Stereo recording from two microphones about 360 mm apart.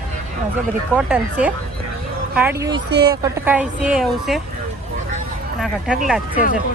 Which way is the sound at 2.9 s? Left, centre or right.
Right.